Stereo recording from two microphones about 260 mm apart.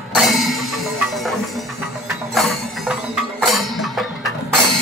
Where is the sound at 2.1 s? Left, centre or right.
Centre.